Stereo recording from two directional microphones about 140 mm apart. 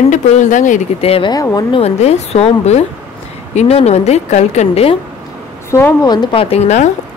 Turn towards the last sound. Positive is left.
turn(degrees=55)  # may be behind; listen again after turning